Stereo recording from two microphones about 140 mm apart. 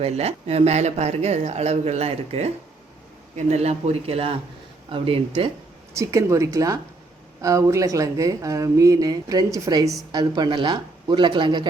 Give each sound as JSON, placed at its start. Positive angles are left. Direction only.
{"t": 0.0, "sound": "speech", "side_deg": -45}
{"t": 6.0, "sound": "speech", "side_deg": -20}